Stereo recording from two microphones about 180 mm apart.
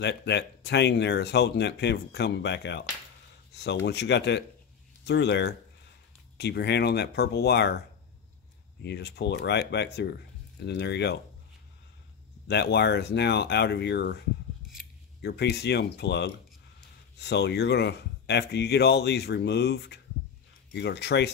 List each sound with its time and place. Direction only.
0.0 s speech: 70° left (ahead or behind)
8.8 s speech: 65° left (ahead or behind)
12.4 s speech: 65° left (ahead or behind)
15.2 s speech: 65° left (ahead or behind)